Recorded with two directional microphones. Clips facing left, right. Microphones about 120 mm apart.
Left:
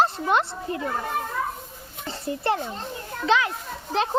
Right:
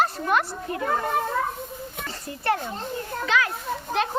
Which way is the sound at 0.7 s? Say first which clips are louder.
Right 1 dB; 25° left (ahead or behind).